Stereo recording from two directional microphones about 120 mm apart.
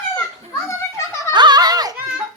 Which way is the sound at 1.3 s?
35° right (ahead or behind).